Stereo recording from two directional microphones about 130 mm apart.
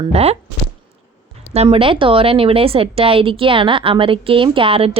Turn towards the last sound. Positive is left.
turn(degrees=-45)  # may be behind; listen again after turning